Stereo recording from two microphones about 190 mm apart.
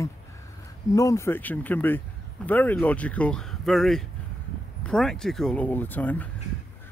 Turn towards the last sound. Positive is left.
turn(degrees=10)  # may be behind; listen again after turning